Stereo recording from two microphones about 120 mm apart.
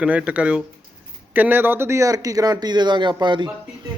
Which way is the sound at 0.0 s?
10° right (ahead or behind).